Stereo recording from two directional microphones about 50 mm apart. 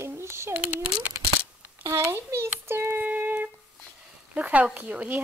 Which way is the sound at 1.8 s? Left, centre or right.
Right.